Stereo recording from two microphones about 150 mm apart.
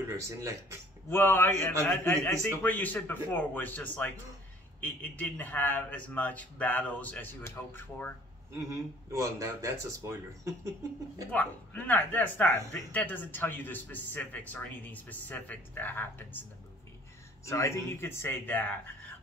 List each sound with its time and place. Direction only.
1.1 s speech: 15° left (ahead or behind)
9.2 s speech: 20° right (ahead or behind)
11.3 s speech: 10° left (ahead or behind)
17.5 s speech: 20° left (ahead or behind)